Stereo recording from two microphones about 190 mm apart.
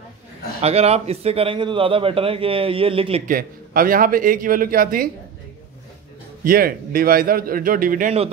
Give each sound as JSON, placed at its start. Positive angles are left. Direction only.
{"t": 0.6, "sound": "a man's voice", "side_deg": -35}
{"t": 3.3, "sound": "a man's voice", "side_deg": -50}
{"t": 6.4, "sound": "a man's voice", "side_deg": -50}